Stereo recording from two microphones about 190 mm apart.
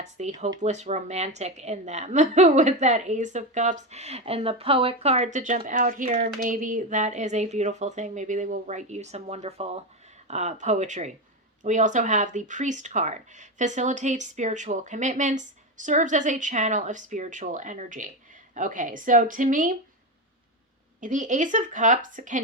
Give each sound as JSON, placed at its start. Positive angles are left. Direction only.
{"t": 0.2, "sound": "speech", "side_deg": -35}
{"t": 21.0, "sound": "speech", "side_deg": -40}